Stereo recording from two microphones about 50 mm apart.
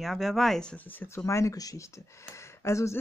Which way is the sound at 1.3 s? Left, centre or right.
Left.